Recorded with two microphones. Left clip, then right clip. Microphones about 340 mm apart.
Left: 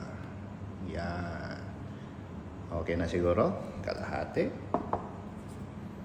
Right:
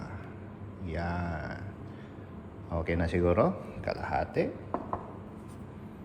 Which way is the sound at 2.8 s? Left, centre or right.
Right.